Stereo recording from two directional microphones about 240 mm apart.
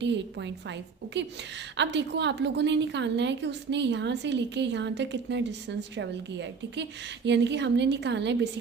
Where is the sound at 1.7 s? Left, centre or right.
Right.